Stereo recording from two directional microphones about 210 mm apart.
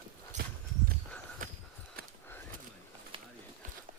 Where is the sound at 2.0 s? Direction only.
45° right (ahead or behind).